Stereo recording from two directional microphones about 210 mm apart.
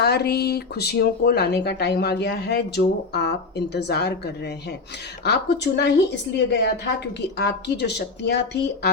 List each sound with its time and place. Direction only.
0.0 s speech: 50° left (ahead or behind)
5.2 s speech: 50° left (ahead or behind)